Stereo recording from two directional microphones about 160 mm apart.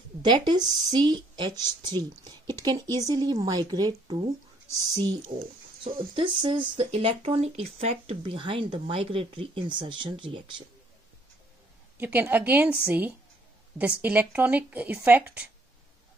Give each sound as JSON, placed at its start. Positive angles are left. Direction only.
{"t": 0.2, "sound": "a woman's voice", "side_deg": -30}
{"t": 12.0, "sound": "speech", "side_deg": -10}